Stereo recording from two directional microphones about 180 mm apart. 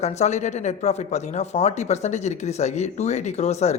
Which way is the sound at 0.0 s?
40° left (ahead or behind).